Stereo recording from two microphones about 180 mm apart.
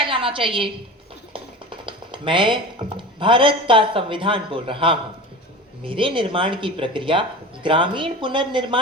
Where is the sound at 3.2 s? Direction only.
30° right (ahead or behind).